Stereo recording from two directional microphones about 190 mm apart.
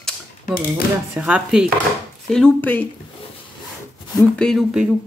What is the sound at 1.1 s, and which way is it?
Speech, 5° right (ahead or behind).